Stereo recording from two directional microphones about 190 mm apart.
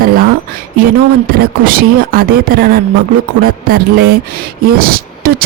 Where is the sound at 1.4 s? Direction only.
50° right (ahead or behind).